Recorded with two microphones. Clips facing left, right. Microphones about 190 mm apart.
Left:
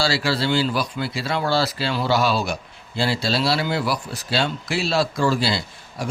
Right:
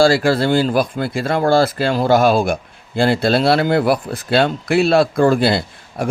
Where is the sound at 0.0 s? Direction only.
50° right (ahead or behind).